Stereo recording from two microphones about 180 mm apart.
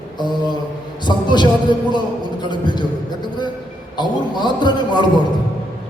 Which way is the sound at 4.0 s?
25° left (ahead or behind).